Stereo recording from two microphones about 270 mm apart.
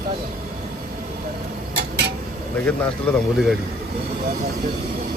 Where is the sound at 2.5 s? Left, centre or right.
Centre.